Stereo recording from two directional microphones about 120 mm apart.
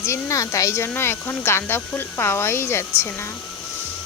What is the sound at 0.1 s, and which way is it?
Speech, 25° left (ahead or behind).